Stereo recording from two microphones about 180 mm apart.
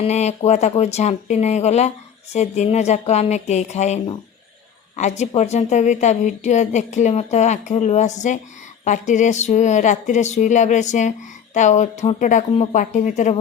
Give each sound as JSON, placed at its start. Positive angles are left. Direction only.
{"t": 0.0, "sound": "a woman's voice", "side_deg": 40}